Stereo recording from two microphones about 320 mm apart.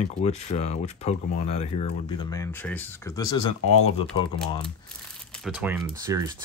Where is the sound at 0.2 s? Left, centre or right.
Centre.